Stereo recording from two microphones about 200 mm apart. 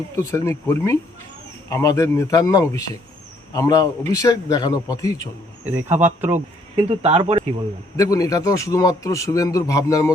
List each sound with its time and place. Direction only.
0.2 s speech: 15° left (ahead or behind)
5.7 s speech: 10° right (ahead or behind)
6.8 s speech: 30° right (ahead or behind)
7.9 s speech: 15° left (ahead or behind)